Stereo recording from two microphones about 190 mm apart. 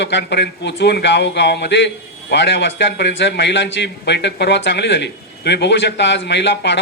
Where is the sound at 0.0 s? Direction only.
65° left (ahead or behind).